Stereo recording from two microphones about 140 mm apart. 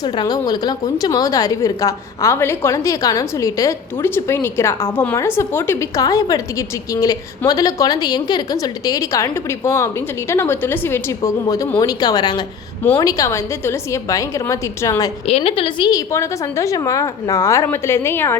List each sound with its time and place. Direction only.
0.0 s a woman's voice: 30° left (ahead or behind)
15.3 s a woman's voice: 45° left (ahead or behind)
15.9 s a woman's voice: 25° left (ahead or behind)